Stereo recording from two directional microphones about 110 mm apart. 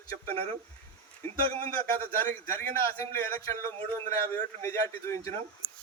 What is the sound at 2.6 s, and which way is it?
A man's voice, 20° left (ahead or behind).